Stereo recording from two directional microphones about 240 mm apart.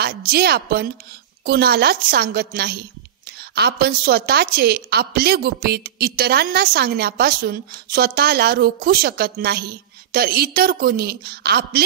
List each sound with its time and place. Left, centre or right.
0.0 s a woman's voice: right